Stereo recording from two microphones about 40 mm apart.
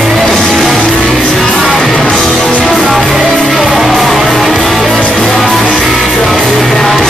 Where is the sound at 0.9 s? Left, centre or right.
Left.